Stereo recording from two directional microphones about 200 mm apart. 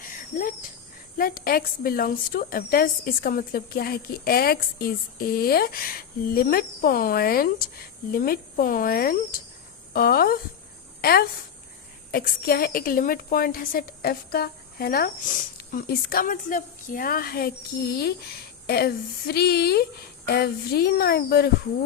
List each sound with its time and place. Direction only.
0.1 s a sound: 45° left (ahead or behind)
1.2 s a woman's voice: 45° left (ahead or behind)
18.6 s a woman's voice: 50° left (ahead or behind)